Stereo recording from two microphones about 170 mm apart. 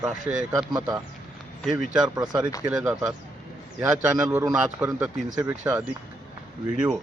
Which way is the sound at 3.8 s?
15° right (ahead or behind).